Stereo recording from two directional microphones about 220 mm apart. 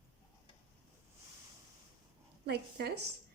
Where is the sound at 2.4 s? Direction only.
50° right (ahead or behind).